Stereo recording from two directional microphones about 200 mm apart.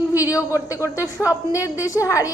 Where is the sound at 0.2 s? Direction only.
15° left (ahead or behind).